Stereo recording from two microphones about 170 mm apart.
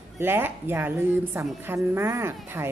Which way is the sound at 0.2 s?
10° right (ahead or behind).